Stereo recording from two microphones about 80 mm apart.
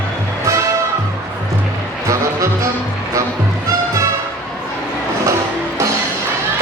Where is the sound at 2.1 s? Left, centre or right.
Right.